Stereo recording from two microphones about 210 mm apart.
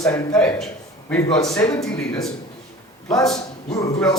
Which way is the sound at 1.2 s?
20° left (ahead or behind).